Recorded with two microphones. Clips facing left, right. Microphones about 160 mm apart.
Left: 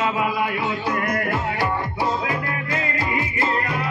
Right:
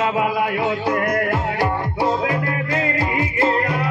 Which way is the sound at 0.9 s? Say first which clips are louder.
Right 3 dB; 50° right (ahead or behind).